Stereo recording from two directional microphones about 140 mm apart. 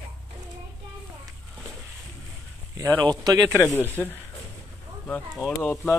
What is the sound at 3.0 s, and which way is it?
Speech, 30° right (ahead or behind).